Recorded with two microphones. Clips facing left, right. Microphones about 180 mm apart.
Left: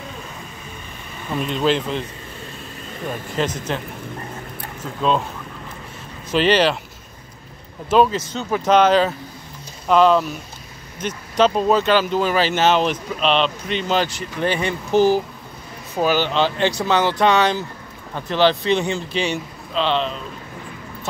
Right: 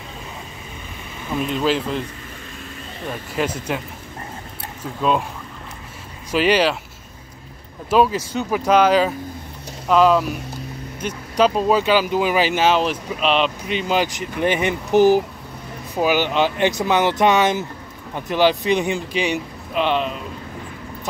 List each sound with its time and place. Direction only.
1.3 s speech: 5° right (ahead or behind)
3.3 s speech: 10° right (ahead or behind)
6.3 s speech: 5° right (ahead or behind)
7.9 s speech: 10° right (ahead or behind)